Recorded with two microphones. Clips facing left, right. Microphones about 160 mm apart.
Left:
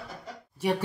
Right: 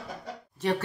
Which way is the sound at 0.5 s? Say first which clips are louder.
Even; 10° left (ahead or behind).